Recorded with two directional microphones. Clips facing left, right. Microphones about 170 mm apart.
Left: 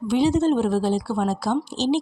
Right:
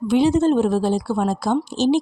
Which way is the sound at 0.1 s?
55° right (ahead or behind).